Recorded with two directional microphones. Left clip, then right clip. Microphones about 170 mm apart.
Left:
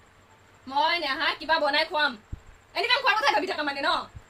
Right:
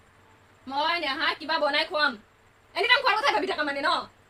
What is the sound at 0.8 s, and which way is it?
A woman's voice, 5° left (ahead or behind).